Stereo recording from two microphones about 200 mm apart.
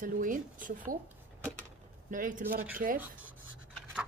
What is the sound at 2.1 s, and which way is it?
Speech, 40° right (ahead or behind).